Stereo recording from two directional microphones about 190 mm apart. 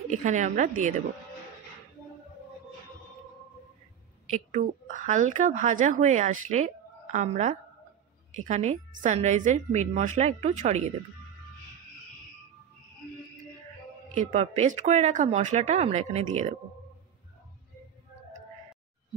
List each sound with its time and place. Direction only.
0.1 s a woman's voice: 40° right (ahead or behind)
4.3 s a woman's voice: 40° right (ahead or behind)
14.1 s a woman's voice: 40° right (ahead or behind)